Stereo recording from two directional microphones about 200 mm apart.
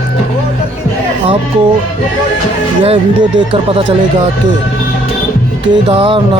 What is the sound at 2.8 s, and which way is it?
Music, 25° right (ahead or behind).